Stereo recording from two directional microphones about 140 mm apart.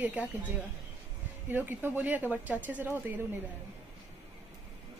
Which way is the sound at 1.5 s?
15° right (ahead or behind).